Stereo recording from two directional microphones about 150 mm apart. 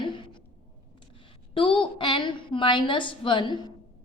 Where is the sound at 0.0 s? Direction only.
30° left (ahead or behind).